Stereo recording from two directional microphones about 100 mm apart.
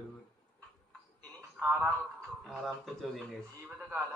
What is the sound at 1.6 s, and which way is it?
Speech, 20° right (ahead or behind).